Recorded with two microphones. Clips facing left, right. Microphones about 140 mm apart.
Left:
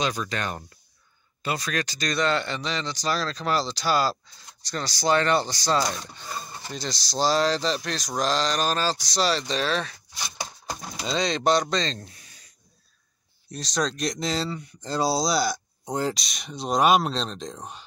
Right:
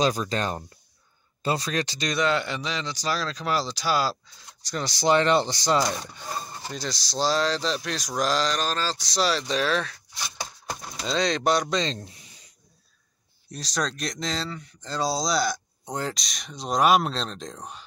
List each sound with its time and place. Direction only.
0.0 s speech: 35° right (ahead or behind)
2.1 s speech: 10° right (ahead or behind)
4.8 s speech: 20° right (ahead or behind)
6.7 s speech: 5° right (ahead or behind)
8.5 s speech: 10° left (ahead or behind)
9.0 s speech: centre (ahead or behind)
11.0 s speech: 5° left (ahead or behind); by 12.4 s 20° right (ahead or behind)
13.5 s speech: 5° right (ahead or behind)